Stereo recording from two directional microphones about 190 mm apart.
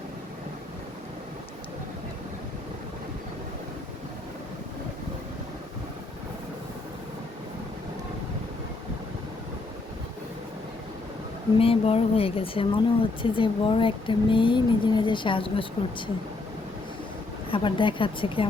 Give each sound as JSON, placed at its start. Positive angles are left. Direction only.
{"t": 11.6, "sound": "speech", "side_deg": 30}
{"t": 17.5, "sound": "speech", "side_deg": 25}